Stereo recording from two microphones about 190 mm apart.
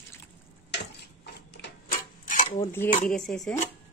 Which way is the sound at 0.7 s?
60° left (ahead or behind).